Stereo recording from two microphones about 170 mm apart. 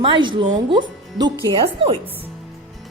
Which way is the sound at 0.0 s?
30° right (ahead or behind).